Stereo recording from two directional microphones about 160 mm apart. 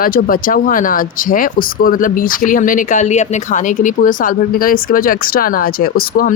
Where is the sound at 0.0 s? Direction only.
65° left (ahead or behind).